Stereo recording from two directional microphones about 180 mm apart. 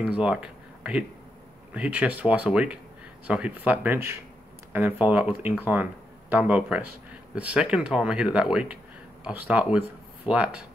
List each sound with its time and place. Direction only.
0.0 s speech: 5° right (ahead or behind)